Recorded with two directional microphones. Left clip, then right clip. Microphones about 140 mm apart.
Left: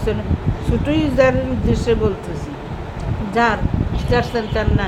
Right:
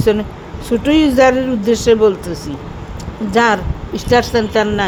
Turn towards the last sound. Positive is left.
turn(degrees=-90)